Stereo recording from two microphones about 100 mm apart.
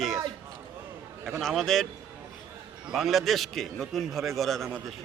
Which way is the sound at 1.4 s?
Centre (ahead or behind).